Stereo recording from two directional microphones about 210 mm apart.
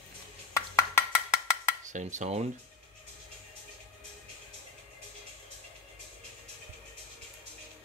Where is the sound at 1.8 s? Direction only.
35° right (ahead or behind).